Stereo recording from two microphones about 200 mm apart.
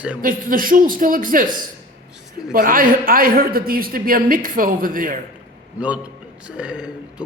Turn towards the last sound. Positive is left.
turn(degrees=-5)  # may be behind; listen again after turning